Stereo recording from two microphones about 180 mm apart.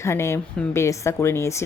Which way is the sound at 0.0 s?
15° left (ahead or behind).